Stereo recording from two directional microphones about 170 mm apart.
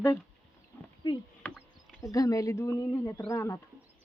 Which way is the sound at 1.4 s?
10° left (ahead or behind).